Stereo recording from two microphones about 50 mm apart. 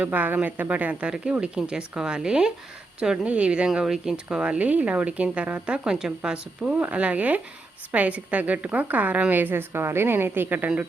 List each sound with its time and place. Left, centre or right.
0.0 s a woman's voice: right
3.8 s speech: centre; by 5.5 s right
5.6 s a woman's voice: centre; by 10.7 s right